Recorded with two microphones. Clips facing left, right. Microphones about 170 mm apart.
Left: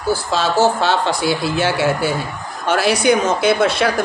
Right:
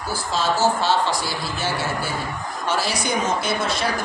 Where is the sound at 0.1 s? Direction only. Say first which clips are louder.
Left 6 dB; 70° left (ahead or behind).